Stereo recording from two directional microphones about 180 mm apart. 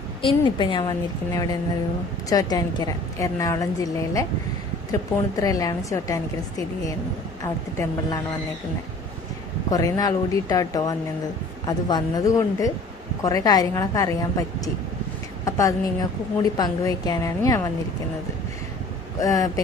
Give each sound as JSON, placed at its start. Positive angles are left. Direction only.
{"t": 0.2, "sound": "a woman's voice", "side_deg": 30}
{"t": 5.4, "sound": "a woman's voice", "side_deg": 20}
{"t": 7.4, "sound": "a woman's voice", "side_deg": 20}
{"t": 9.7, "sound": "a woman's voice", "side_deg": 20}
{"t": 19.2, "sound": "a woman's voice", "side_deg": 20}